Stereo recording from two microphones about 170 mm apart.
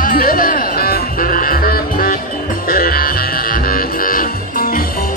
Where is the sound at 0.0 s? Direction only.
55° left (ahead or behind).